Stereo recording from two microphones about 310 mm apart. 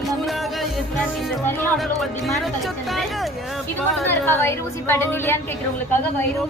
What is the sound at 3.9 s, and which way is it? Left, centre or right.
A woman's voice, centre.